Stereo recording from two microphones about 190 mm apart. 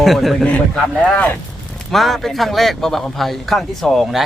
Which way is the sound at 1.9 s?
Centre (ahead or behind).